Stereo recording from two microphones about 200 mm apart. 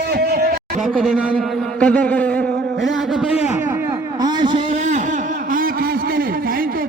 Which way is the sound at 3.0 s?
Centre (ahead or behind).